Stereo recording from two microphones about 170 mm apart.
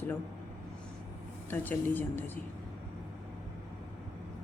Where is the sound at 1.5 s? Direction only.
10° left (ahead or behind).